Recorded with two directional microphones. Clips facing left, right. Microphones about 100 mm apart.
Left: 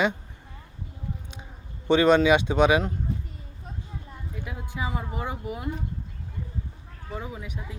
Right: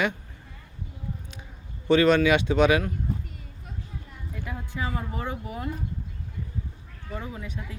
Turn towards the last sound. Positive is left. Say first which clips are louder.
# even
turn(degrees=10)  # may be behind; listen again after turning